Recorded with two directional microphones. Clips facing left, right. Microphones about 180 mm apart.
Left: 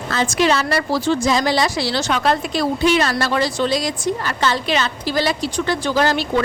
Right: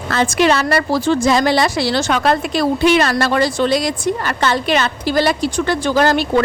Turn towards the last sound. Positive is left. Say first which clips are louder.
# right 4 dB
turn(degrees=-50)  # may be behind; listen again after turning